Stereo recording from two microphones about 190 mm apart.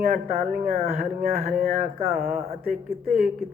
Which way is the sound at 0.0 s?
45° right (ahead or behind).